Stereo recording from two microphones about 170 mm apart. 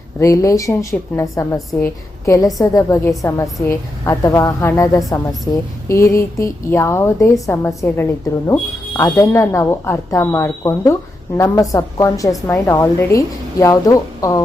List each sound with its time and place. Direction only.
0.2 s a woman's voice: 20° left (ahead or behind)